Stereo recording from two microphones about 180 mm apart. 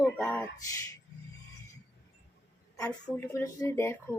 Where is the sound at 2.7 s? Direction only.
15° left (ahead or behind).